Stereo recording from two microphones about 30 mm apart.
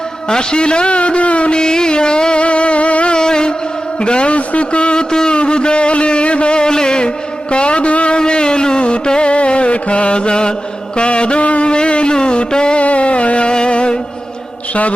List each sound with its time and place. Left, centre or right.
0.3 s a man's voice: left
1.5 s music: left
3.1 s a sound: left
4.0 s a man's voice: left
5.1 s a sound: left
5.4 s music: left
7.5 s a man's voice: left
8.2 s music: left
10.9 s a sound: left
11.7 s music: left
12.1 s a sound: left
12.8 s music: left